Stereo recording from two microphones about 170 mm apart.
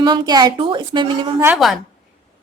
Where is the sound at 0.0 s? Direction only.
25° right (ahead or behind).